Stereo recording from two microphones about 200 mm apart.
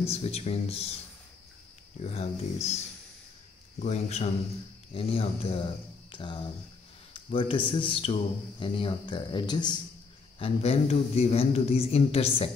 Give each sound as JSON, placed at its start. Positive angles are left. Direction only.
{"t": 0.1, "sound": "speech", "side_deg": 30}
{"t": 2.0, "sound": "speech", "side_deg": 30}
{"t": 3.8, "sound": "a man's voice", "side_deg": 35}